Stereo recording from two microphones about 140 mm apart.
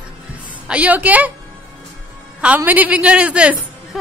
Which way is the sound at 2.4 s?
10° right (ahead or behind).